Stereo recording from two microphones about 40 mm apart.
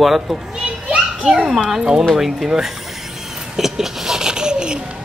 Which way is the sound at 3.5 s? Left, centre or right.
Centre.